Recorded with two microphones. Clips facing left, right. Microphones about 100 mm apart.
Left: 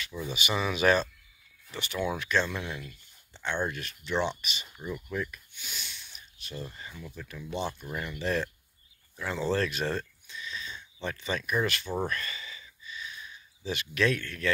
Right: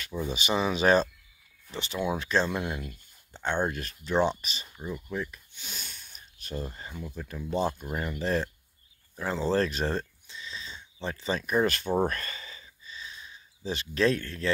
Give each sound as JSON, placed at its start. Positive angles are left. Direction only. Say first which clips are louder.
{"t": 0.0, "sound": "speech", "louder": "right 3 dB", "side_deg": -40}
{"t": 5.1, "sound": "speech", "louder": "even", "side_deg": -20}
{"t": 9.1, "sound": "a sound", "louder": "right 2 dB", "side_deg": -35}